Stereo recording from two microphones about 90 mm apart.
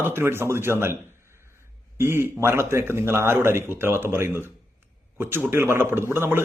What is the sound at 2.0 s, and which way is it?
A man's voice, 25° right (ahead or behind).